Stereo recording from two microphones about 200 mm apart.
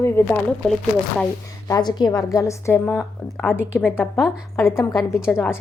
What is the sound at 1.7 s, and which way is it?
A woman's voice, 20° left (ahead or behind).